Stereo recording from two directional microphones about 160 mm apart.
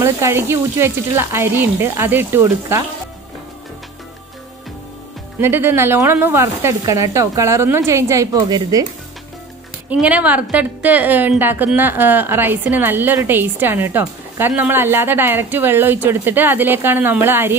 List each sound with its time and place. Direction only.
0.0 s a woman's voice: 15° right (ahead or behind)
5.4 s a woman's voice: 15° right (ahead or behind)
9.8 s a woman's voice: 10° right (ahead or behind)